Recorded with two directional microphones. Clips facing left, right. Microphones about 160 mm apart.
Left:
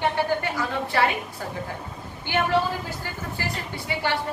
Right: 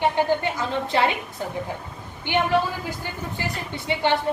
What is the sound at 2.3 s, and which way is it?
A woman's voice, 20° right (ahead or behind).